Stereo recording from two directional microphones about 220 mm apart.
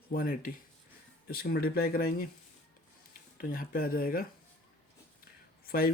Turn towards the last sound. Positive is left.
turn(degrees=40)  # may be behind; listen again after turning